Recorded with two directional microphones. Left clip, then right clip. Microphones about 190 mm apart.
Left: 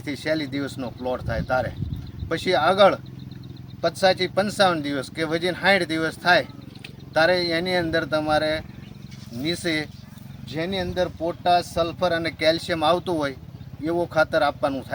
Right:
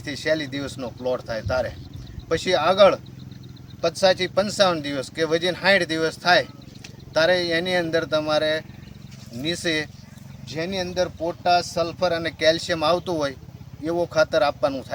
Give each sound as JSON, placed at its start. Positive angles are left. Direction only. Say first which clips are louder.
{"t": 0.0, "sound": "speech", "louder": "right 2 dB", "side_deg": -15}